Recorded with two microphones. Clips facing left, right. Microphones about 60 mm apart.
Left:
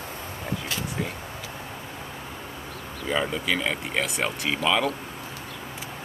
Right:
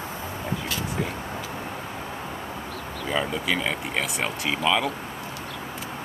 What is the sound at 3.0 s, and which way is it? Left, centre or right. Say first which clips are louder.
Speech: even; centre.